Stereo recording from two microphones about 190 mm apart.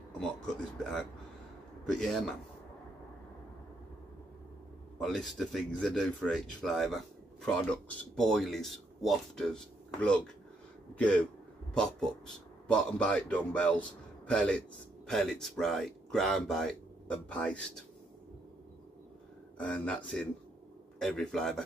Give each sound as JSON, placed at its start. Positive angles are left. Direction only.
{"t": 1.9, "sound": "speech", "side_deg": 0}
{"t": 5.0, "sound": "a man's voice", "side_deg": 0}
{"t": 19.6, "sound": "a man's voice", "side_deg": 5}